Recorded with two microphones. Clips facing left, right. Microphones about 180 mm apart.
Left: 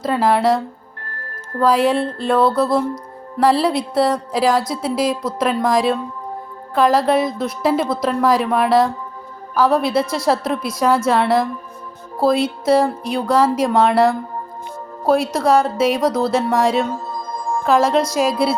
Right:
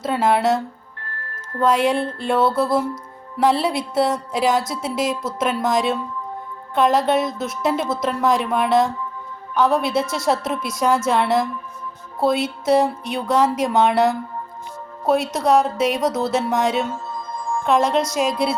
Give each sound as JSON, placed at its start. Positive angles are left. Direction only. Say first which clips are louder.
{"t": 0.0, "sound": "speech", "louder": "left 2 dB", "side_deg": 0}
{"t": 1.0, "sound": "music", "louder": "left 1 dB", "side_deg": 40}
{"t": 1.6, "sound": "speech", "louder": "left 2 dB", "side_deg": 0}
{"t": 16.9, "sound": "music", "louder": "left 3 dB", "side_deg": 35}
{"t": 17.6, "sound": "speech", "louder": "left 3 dB", "side_deg": 0}